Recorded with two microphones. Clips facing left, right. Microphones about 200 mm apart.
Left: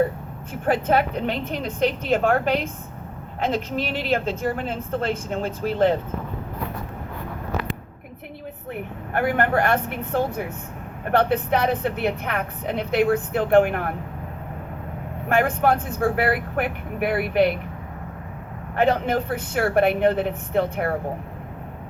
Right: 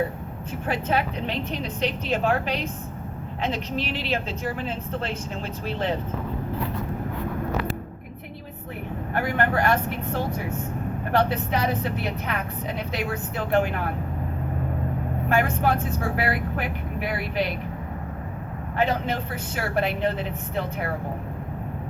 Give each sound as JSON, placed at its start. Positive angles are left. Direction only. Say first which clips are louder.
{"t": 0.6, "sound": "a woman's voice", "louder": "left 5 dB", "side_deg": 50}
{"t": 9.1, "sound": "a woman's voice", "louder": "left 3 dB", "side_deg": 55}
{"t": 15.3, "sound": "a woman's voice", "louder": "left 3 dB", "side_deg": 55}
{"t": 18.8, "sound": "a woman's voice", "louder": "left 5 dB", "side_deg": 55}